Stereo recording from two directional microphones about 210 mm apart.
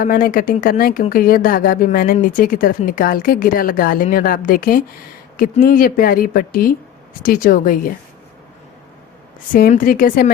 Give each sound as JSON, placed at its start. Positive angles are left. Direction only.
{"t": 0.0, "sound": "a woman's voice", "side_deg": 40}
{"t": 9.5, "sound": "a woman's voice", "side_deg": 40}